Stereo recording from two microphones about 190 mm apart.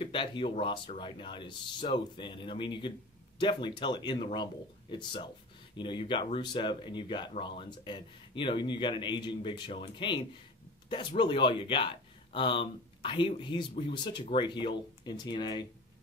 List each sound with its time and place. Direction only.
0.0 s speech: 25° left (ahead or behind)